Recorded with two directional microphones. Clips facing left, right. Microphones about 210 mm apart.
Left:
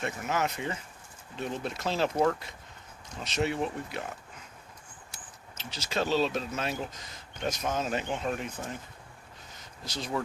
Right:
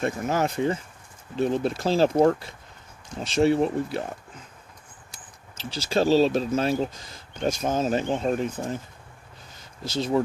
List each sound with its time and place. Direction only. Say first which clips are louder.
0.0 s speech: right 6 dB; 35° right (ahead or behind)
5.7 s speech: right 8 dB; 30° right (ahead or behind)
9.8 s speech: right 9 dB; 25° right (ahead or behind)